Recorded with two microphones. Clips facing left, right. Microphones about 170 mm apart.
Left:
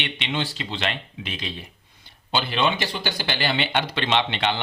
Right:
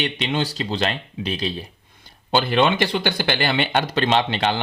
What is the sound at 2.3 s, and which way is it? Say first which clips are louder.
Speech: right 5 dB; 50° right (ahead or behind).